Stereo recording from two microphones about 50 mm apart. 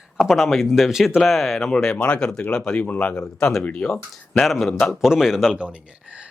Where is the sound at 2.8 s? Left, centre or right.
Left.